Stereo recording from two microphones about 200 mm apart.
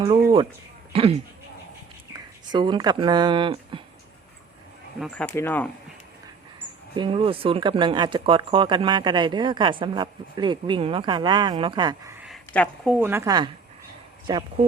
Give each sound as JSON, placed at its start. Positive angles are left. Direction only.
{"t": 0.9, "sound": "speech", "side_deg": -30}
{"t": 4.9, "sound": "speech", "side_deg": 5}
{"t": 6.9, "sound": "speech", "side_deg": -25}
{"t": 12.2, "sound": "a sound", "side_deg": 0}
{"t": 13.0, "sound": "speech", "side_deg": -10}